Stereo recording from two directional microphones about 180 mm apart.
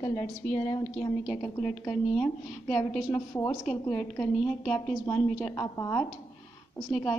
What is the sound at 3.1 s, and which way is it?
Speech, 15° left (ahead or behind).